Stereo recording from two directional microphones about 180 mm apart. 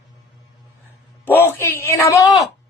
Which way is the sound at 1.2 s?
10° left (ahead or behind).